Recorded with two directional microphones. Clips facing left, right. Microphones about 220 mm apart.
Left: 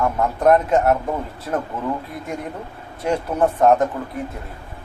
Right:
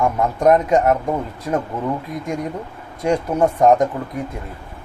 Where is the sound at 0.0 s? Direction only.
15° right (ahead or behind).